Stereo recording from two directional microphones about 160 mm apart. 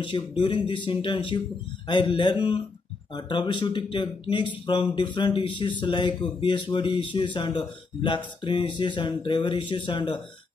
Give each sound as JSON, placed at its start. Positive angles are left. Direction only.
{"t": 0.4, "sound": "speech", "side_deg": 30}